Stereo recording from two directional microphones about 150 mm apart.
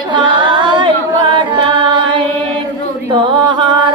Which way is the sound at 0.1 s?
30° right (ahead or behind).